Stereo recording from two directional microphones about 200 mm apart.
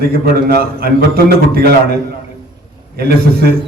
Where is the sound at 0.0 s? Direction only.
50° right (ahead or behind).